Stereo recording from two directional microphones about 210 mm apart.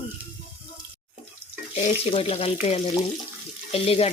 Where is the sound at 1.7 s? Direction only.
30° left (ahead or behind).